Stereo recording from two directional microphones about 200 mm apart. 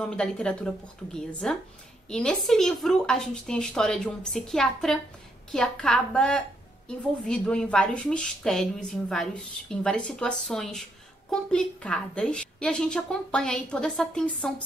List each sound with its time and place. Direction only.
0.0 s a woman's voice: 5° left (ahead or behind)